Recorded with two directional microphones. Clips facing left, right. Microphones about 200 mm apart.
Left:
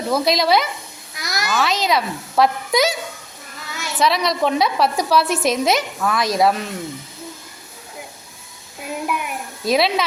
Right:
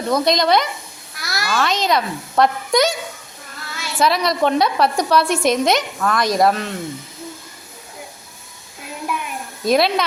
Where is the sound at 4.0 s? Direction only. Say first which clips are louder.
Right 1 dB; centre (ahead or behind).